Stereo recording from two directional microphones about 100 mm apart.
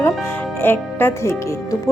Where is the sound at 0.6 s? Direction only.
20° left (ahead or behind).